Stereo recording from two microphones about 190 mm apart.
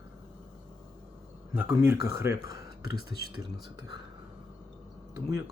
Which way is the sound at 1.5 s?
10° right (ahead or behind).